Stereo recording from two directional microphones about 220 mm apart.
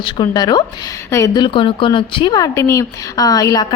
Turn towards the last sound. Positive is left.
turn(degrees=15)  # may be behind; listen again after turning